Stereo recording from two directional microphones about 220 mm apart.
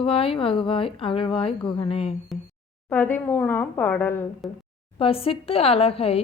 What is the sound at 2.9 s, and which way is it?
Speech, 10° left (ahead or behind).